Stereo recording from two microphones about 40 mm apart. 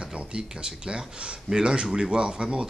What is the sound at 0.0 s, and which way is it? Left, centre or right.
Speech, right.